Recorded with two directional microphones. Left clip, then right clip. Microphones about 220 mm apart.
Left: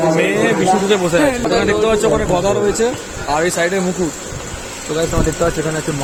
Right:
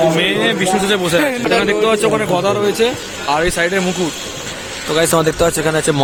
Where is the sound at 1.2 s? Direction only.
25° right (ahead or behind).